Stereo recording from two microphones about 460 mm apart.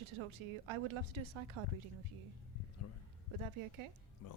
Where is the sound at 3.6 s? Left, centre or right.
Right.